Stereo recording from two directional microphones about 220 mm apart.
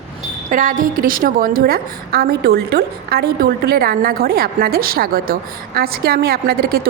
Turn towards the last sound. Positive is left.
turn(degrees=-45)  # may be behind; listen again after turning